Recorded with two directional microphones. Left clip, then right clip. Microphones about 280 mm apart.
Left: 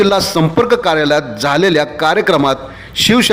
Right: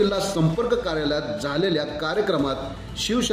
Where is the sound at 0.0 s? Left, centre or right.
Left.